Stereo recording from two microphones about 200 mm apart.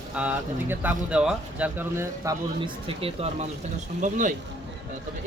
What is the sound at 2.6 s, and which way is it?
Speech, 30° right (ahead or behind).